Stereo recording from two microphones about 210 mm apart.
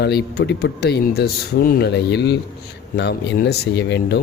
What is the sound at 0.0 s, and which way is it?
Speech, 50° left (ahead or behind).